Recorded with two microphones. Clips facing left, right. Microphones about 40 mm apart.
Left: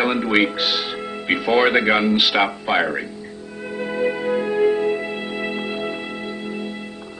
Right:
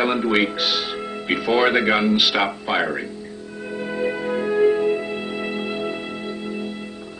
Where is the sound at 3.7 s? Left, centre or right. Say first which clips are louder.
Left 2 dB; centre.